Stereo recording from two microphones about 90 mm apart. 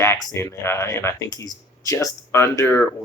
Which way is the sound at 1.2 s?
45° left (ahead or behind).